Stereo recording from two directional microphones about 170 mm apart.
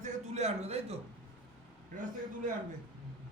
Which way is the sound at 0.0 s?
40° right (ahead or behind).